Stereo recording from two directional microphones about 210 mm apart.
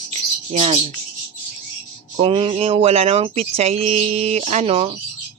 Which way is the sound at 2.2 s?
25° right (ahead or behind).